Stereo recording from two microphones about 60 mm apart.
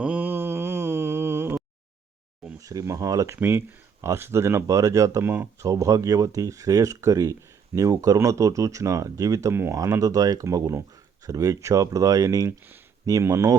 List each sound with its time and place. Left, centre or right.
0.0 s mantra: right
0.3 s mantra: right
2.6 s speech: right
3.3 s speech: right
4.6 s speech: right
5.2 s speech: right
5.5 s speech: right
9.5 s speech: right
10.0 s speech: right
12.5 s speech: right
13.1 s speech: right